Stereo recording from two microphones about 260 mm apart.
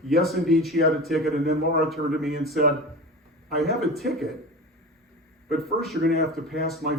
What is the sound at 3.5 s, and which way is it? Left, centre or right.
Speech, centre.